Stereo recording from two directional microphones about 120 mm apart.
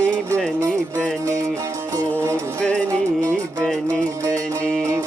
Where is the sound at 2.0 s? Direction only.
25° right (ahead or behind).